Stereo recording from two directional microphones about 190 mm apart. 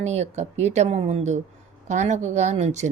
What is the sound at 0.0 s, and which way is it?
Speech, 35° right (ahead or behind).